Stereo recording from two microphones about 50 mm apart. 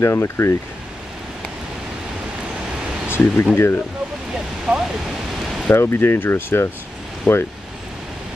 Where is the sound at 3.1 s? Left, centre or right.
Left.